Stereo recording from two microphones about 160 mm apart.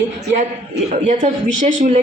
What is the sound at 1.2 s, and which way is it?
Speech, 45° right (ahead or behind).